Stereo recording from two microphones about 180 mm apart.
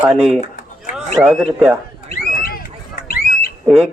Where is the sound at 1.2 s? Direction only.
Centre (ahead or behind).